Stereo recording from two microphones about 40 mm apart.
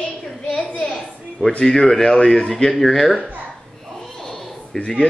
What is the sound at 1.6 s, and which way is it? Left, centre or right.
Speech, centre.